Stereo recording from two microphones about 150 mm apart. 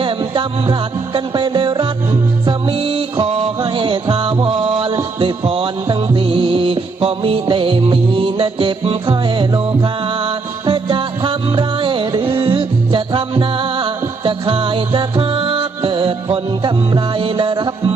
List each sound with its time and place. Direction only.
0.0 s music: 35° right (ahead or behind)